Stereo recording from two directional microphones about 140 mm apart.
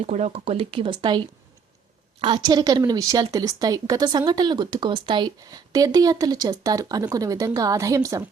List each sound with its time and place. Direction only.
0.0 s speech: 50° right (ahead or behind); by 1.2 s 35° right (ahead or behind)
2.2 s speech: 30° right (ahead or behind)